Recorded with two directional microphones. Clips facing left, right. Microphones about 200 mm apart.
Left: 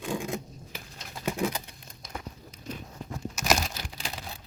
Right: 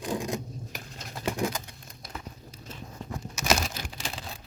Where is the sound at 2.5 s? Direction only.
25° right (ahead or behind).